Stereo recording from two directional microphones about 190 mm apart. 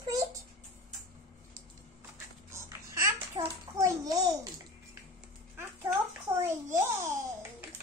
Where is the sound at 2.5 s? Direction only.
15° right (ahead or behind).